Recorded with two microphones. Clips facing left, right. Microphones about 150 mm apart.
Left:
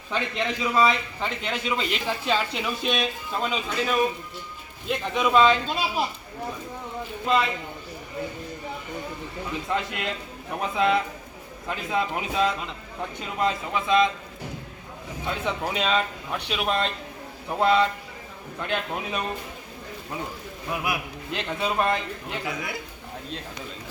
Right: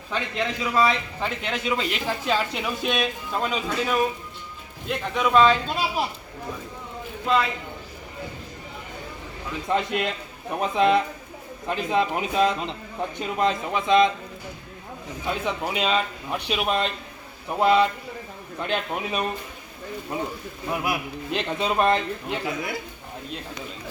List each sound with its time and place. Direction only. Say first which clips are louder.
0.1 s a man's voice: even; centre (ahead or behind)
9.6 s a man's voice: right 6 dB; 20° right (ahead or behind)
15.3 s a man's voice: right 1 dB; 10° right (ahead or behind)
20.7 s a man's voice: right 2 dB; 25° right (ahead or behind)